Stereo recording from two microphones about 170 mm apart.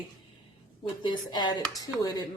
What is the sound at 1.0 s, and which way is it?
A woman's voice, 25° left (ahead or behind).